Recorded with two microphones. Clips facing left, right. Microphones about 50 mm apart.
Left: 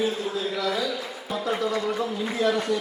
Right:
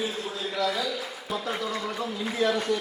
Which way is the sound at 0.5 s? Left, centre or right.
Centre.